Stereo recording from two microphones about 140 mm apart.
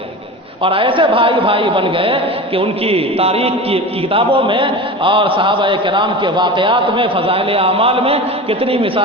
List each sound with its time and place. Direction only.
0.6 s a man's voice: 40° right (ahead or behind)